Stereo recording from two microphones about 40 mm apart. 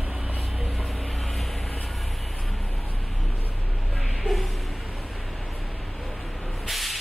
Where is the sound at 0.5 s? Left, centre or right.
Centre.